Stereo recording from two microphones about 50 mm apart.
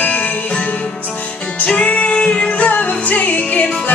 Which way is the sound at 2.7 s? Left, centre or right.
Left.